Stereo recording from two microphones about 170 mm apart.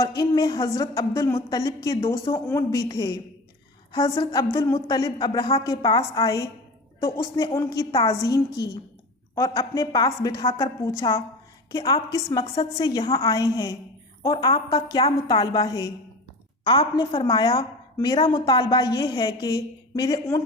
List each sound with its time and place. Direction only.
0.2 s a woman's voice: 25° left (ahead or behind)
4.2 s a woman's voice: 25° left (ahead or behind)